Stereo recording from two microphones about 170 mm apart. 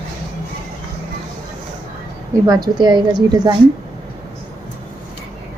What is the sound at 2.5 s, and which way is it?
A woman's voice, 25° right (ahead or behind).